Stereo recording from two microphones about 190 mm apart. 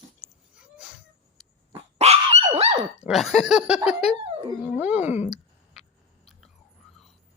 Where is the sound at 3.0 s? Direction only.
Centre (ahead or behind).